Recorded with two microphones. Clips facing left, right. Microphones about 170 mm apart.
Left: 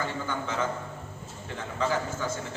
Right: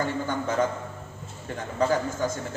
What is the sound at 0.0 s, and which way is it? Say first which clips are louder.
Speech: right 4 dB; 45° right (ahead or behind).